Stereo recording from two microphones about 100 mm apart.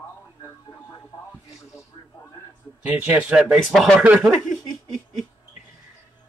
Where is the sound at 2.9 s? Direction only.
10° right (ahead or behind).